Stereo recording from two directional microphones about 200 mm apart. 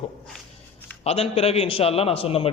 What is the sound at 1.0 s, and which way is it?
A man's voice, 30° left (ahead or behind).